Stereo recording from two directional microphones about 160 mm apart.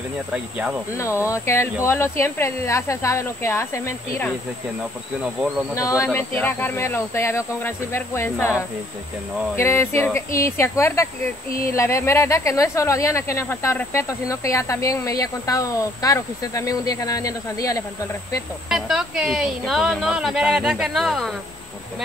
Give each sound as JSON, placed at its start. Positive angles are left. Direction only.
{"t": 0.3, "sound": "speech", "side_deg": -10}
{"t": 0.9, "sound": "speech", "side_deg": 15}
{"t": 5.8, "sound": "speech", "side_deg": 20}
{"t": 18.7, "sound": "speech", "side_deg": -5}